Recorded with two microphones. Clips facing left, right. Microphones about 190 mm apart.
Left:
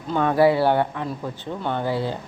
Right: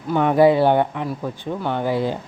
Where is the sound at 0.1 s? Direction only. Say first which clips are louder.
Right 3 dB; 15° right (ahead or behind).